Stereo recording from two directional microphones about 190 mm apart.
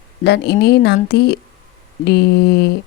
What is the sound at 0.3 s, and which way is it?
Speech, 60° left (ahead or behind).